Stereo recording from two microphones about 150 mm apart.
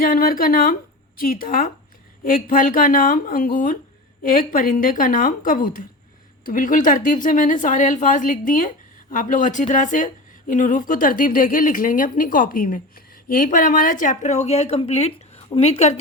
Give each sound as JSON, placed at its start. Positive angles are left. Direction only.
{"t": 0.0, "sound": "a woman's voice", "side_deg": 70}